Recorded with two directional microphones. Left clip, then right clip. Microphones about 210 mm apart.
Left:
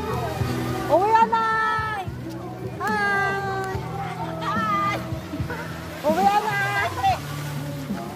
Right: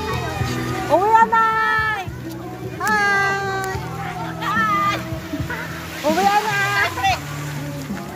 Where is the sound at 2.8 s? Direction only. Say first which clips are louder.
Right 5 dB; 30° right (ahead or behind).